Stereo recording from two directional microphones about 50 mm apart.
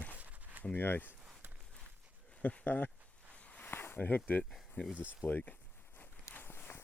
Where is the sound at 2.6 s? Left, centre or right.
Left.